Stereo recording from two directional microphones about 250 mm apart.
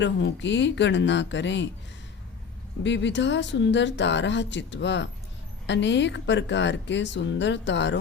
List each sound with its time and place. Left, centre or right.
0.0 s speech: left
2.8 s speech: left